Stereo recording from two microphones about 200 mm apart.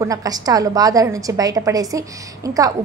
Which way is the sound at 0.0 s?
15° right (ahead or behind).